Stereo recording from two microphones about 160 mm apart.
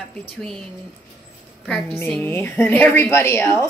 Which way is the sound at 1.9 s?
15° left (ahead or behind).